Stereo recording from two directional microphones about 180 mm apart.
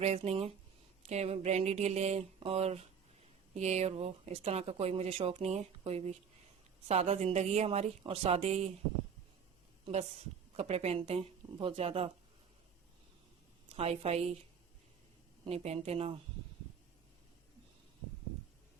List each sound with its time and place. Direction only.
0.0 s speech: 35° right (ahead or behind)
9.8 s speech: 35° right (ahead or behind)
13.7 s speech: 35° right (ahead or behind)
15.4 s speech: 35° right (ahead or behind)